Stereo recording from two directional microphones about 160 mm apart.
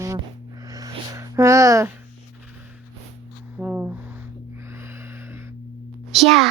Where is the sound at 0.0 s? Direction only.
20° right (ahead or behind).